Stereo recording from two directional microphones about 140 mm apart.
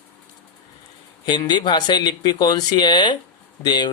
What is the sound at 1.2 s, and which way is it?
Speech, 30° left (ahead or behind).